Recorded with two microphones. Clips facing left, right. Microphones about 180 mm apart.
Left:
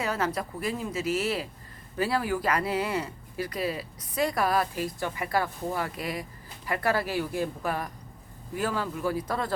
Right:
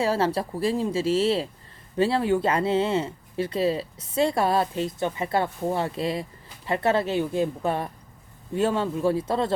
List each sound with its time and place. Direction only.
0.0 s speech: 30° right (ahead or behind)